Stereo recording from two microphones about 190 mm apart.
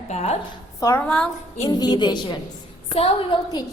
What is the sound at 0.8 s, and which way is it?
Speech, 15° left (ahead or behind).